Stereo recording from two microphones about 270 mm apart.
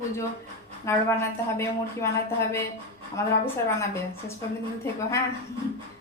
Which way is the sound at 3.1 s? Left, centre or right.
Centre.